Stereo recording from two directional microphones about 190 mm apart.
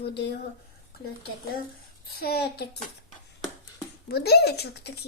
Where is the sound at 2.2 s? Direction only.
55° left (ahead or behind).